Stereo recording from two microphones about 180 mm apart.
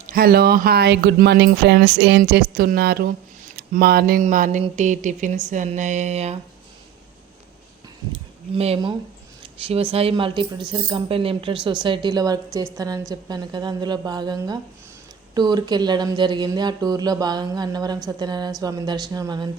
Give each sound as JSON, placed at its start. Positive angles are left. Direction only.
{"t": 0.1, "sound": "speech", "side_deg": -55}
{"t": 4.2, "sound": "a sound", "side_deg": -50}
{"t": 4.6, "sound": "speech", "side_deg": -40}
{"t": 8.1, "sound": "speech", "side_deg": -35}